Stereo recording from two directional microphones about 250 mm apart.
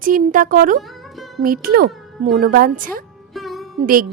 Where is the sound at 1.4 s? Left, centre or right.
Right.